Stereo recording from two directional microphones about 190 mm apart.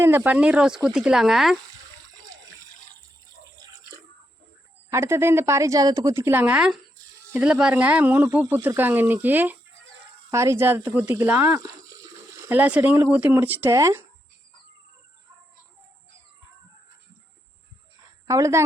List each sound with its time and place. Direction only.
0.0 s speech: 10° right (ahead or behind)
4.9 s speech: 15° right (ahead or behind)
18.3 s speech: 15° right (ahead or behind)